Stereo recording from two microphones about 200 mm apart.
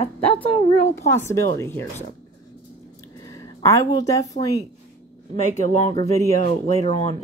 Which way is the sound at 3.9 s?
15° left (ahead or behind).